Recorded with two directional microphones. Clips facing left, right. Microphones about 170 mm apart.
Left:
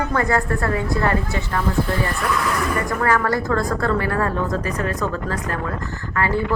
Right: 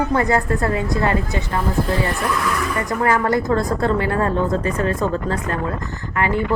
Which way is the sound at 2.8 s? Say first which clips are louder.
Right 4 dB; 20° right (ahead or behind).